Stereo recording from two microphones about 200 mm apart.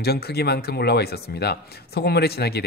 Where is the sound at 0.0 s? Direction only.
55° left (ahead or behind).